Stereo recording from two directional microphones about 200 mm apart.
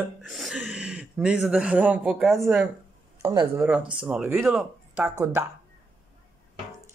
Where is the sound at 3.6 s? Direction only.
5° right (ahead or behind).